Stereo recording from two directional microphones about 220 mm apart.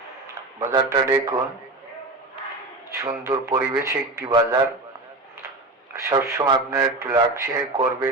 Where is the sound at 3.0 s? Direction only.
15° right (ahead or behind).